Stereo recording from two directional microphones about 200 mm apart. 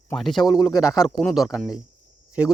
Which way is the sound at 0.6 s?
20° left (ahead or behind).